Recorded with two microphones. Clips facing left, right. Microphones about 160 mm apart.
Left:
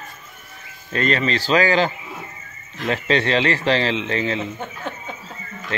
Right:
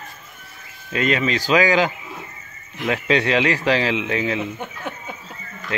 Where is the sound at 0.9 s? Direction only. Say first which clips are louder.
Even; 5° right (ahead or behind).